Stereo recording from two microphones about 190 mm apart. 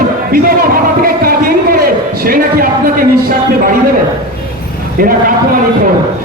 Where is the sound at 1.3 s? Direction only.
50° right (ahead or behind).